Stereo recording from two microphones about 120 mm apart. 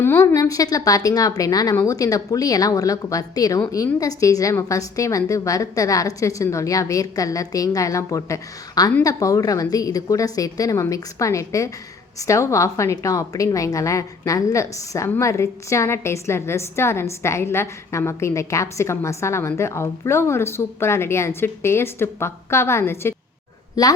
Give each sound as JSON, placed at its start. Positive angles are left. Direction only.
{"t": 0.0, "sound": "a woman's voice", "side_deg": 20}
{"t": 23.8, "sound": "a woman's voice", "side_deg": 30}